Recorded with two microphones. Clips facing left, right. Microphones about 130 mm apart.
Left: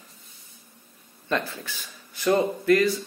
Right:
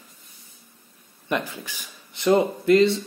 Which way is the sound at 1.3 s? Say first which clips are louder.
Right 1 dB; 15° right (ahead or behind).